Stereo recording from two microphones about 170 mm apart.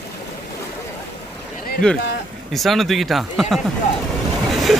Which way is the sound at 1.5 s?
60° left (ahead or behind).